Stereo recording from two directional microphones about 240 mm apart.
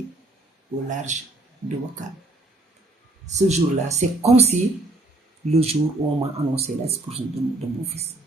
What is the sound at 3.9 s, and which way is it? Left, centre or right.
Speech, right.